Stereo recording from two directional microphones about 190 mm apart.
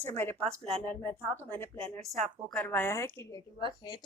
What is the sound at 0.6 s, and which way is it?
Speech, 30° right (ahead or behind).